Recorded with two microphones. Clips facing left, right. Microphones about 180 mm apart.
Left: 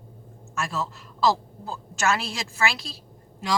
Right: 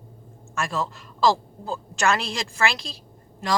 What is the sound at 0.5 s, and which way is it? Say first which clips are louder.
A man's voice: right 2 dB; centre (ahead or behind).